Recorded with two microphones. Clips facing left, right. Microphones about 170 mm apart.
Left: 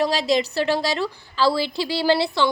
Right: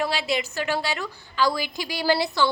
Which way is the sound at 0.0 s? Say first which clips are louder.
Left 5 dB; 35° left (ahead or behind).